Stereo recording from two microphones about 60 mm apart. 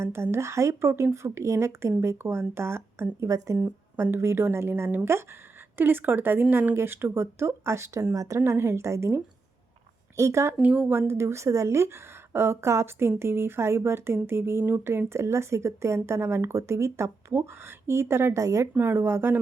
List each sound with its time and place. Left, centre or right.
0.0 s speech: right
3.9 s a woman's voice: right
8.1 s a woman's voice: right
8.4 s a woman's voice: right
10.6 s speech: right
10.8 s speech: right
18.4 s a woman's voice: right
18.8 s a woman's voice: right